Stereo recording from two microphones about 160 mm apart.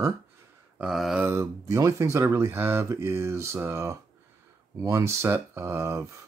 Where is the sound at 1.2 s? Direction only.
20° right (ahead or behind).